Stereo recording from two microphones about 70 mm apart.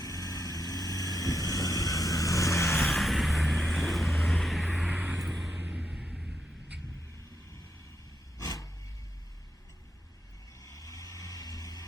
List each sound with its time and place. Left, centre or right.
0.0 s vehicle: left
2.7 s vehicle: centre
4.9 s vehicle: right
5.1 s vehicle: right
5.7 s vehicle: centre
6.1 s vehicle: centre
8.4 s a sound: left
10.6 s vehicle: left